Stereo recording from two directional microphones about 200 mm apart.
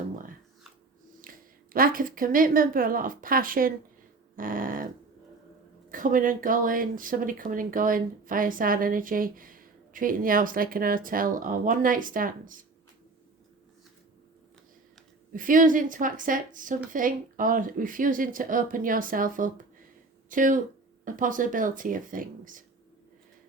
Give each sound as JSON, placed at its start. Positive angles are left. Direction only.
{"t": 1.2, "sound": "speech", "side_deg": -45}
{"t": 4.4, "sound": "dog", "side_deg": -45}
{"t": 5.9, "sound": "speech", "side_deg": -40}
{"t": 15.3, "sound": "speech", "side_deg": -45}